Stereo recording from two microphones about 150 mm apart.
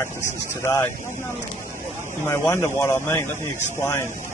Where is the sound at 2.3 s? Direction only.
15° left (ahead or behind).